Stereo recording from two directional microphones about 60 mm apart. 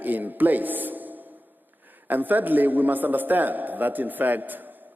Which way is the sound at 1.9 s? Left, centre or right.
Right.